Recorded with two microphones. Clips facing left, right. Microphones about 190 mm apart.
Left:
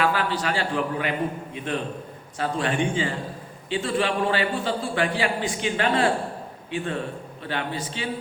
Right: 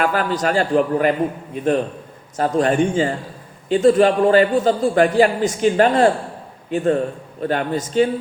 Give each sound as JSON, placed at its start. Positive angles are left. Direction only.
{"t": 0.0, "sound": "a man's voice", "side_deg": -45}
{"t": 2.4, "sound": "a man's voice", "side_deg": -45}